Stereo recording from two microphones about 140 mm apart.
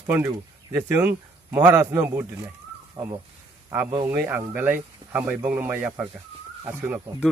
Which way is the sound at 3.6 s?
15° right (ahead or behind).